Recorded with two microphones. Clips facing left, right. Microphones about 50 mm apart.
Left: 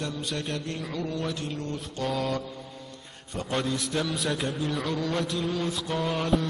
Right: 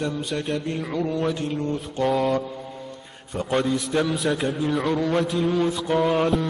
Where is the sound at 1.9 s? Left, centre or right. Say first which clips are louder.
Right 7 dB; centre.